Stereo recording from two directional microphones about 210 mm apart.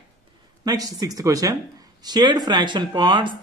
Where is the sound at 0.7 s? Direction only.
15° right (ahead or behind).